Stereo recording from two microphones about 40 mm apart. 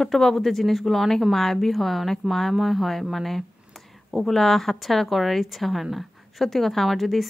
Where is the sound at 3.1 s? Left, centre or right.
Centre.